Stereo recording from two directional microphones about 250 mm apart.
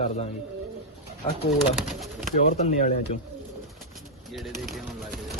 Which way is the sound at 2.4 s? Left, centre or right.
Left.